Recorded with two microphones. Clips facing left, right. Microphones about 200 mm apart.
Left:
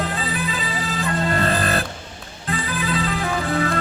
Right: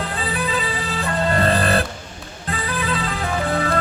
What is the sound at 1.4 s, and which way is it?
Music, 35° right (ahead or behind).